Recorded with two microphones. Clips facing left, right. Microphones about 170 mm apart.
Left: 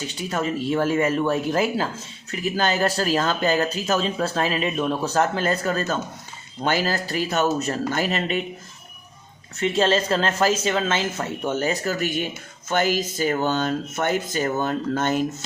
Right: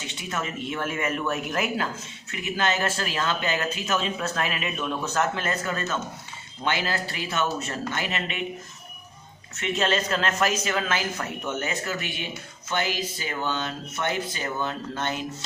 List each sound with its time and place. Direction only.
0.0 s speech: 35° left (ahead or behind)
9.6 s speech: 30° left (ahead or behind)